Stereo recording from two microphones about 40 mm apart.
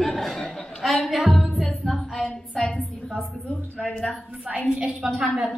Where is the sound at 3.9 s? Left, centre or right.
Centre.